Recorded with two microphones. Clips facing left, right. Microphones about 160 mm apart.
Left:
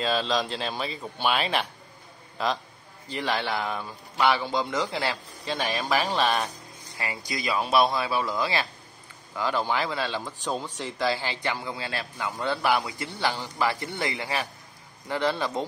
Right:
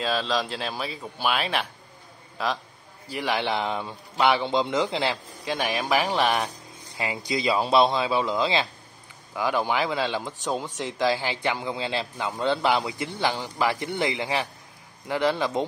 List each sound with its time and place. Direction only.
0.0 s a man's voice: centre (ahead or behind)
3.1 s a man's voice: 10° right (ahead or behind)